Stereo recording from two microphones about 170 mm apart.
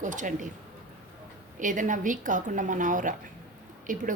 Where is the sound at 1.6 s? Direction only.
50° right (ahead or behind).